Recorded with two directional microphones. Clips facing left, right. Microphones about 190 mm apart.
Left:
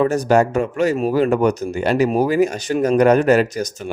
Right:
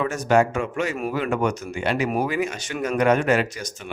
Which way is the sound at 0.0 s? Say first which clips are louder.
Left 5 dB; 35° left (ahead or behind).